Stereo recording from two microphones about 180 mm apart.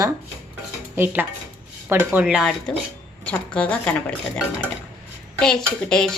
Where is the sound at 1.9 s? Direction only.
10° right (ahead or behind); by 4.1 s 5° left (ahead or behind).